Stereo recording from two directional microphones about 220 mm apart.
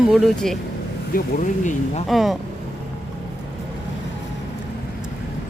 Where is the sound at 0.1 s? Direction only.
Centre (ahead or behind).